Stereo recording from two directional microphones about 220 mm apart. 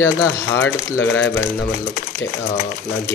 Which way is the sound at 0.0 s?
10° left (ahead or behind).